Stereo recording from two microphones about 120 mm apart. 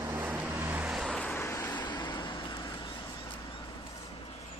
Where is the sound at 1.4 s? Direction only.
25° left (ahead or behind).